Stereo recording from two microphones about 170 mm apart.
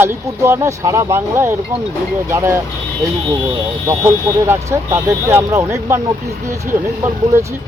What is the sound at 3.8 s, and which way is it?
Speech, 15° right (ahead or behind).